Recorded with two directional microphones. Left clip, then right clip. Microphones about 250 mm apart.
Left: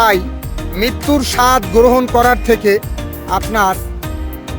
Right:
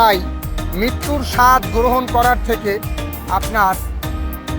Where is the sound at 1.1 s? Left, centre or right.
Left.